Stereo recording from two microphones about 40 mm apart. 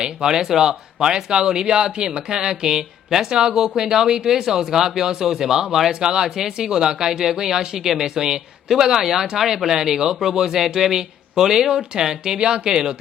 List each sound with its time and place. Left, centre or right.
0.0 s speech: centre